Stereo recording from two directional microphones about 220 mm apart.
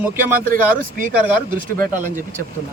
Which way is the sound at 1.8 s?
35° right (ahead or behind).